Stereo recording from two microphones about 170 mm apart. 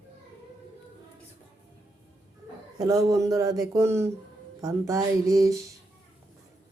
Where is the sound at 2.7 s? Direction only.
20° right (ahead or behind).